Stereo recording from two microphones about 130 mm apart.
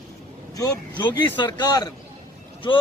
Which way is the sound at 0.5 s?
25° left (ahead or behind).